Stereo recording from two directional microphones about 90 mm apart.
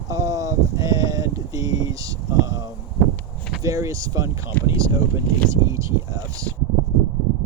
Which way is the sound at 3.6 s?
35° right (ahead or behind).